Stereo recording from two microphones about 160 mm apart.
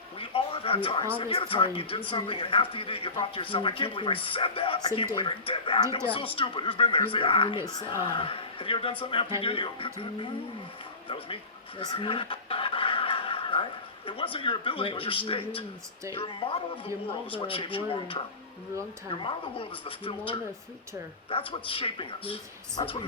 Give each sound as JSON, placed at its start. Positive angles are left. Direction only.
{"t": 0.2, "sound": "a sound", "side_deg": 35}
{"t": 1.2, "sound": "a man's voice", "side_deg": 35}
{"t": 11.8, "sound": "fowl", "side_deg": 35}
{"t": 14.1, "sound": "a man's voice", "side_deg": 35}